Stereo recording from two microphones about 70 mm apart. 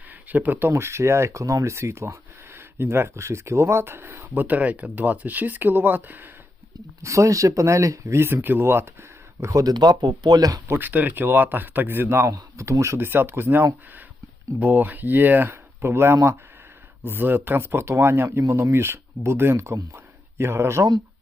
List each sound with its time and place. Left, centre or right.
0.1 s speech: right
0.7 s speech: right
7.0 s speech: right
10.7 s a man's voice: right
13.0 s a man's voice: right